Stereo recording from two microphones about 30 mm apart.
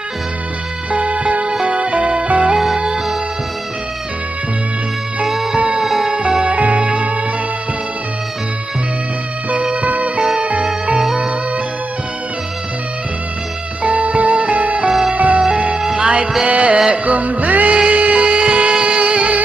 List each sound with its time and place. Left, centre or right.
0.9 s music: right
1.5 s music: right
1.8 s music: right
5.2 s music: centre
6.0 s music: right
9.8 s music: right
10.1 s music: right
13.8 s music: right
14.9 s music: right
15.1 s music: right
16.0 s music: right